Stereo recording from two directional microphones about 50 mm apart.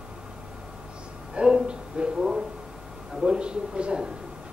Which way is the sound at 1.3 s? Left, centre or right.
Centre.